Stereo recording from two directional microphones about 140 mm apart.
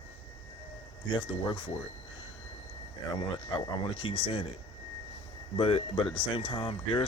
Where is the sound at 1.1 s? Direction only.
35° left (ahead or behind).